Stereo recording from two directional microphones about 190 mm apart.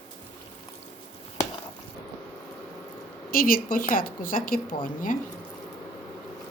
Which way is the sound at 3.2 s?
50° left (ahead or behind).